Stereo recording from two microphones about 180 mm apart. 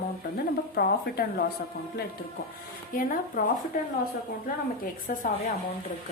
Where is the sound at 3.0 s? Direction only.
50° left (ahead or behind).